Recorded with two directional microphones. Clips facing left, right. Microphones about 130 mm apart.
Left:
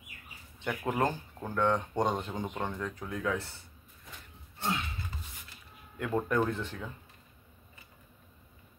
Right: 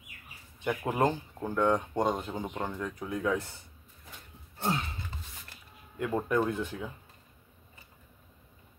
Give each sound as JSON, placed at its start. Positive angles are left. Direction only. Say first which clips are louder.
{"t": 0.7, "sound": "speech", "louder": "right 3 dB", "side_deg": -15}
{"t": 3.1, "sound": "speech", "louder": "right 4 dB", "side_deg": -20}
{"t": 4.6, "sound": "a sound", "louder": "right 2 dB", "side_deg": -35}
{"t": 6.1, "sound": "speech", "louder": "right 1 dB", "side_deg": -10}